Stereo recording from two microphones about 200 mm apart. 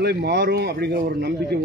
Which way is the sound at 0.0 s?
55° right (ahead or behind).